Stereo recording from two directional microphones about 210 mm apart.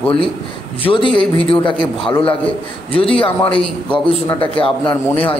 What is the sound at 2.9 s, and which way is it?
Speech, 25° left (ahead or behind).